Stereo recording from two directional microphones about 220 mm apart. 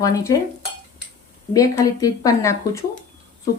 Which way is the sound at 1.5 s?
15° left (ahead or behind).